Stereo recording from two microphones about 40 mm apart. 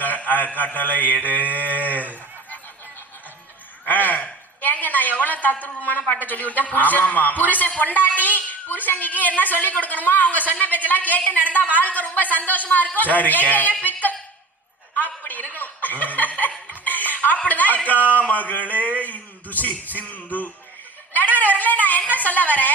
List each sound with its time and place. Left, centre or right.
0.0 s a man's voice: left
1.5 s livestock: left
3.8 s a sound: left
4.6 s a woman's voice: left
14.9 s chuckle: left
16.8 s a sound: left
17.2 s a woman's voice: left
18.7 s music: left
21.1 s a sound: left
22.1 s speech: left